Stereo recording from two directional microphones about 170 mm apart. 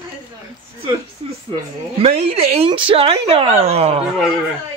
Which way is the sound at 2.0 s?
35° right (ahead or behind).